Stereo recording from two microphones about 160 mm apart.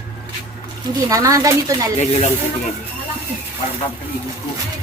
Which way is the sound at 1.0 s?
20° right (ahead or behind).